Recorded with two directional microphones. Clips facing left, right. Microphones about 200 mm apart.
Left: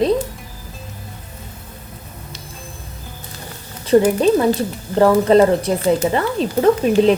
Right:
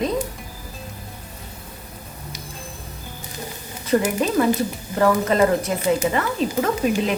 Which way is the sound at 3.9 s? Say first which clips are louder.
Left 6 dB; 30° left (ahead or behind).